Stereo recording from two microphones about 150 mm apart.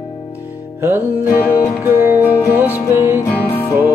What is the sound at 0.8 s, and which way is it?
Music, 15° right (ahead or behind).